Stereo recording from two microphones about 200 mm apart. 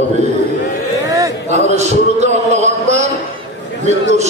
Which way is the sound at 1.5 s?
35° right (ahead or behind).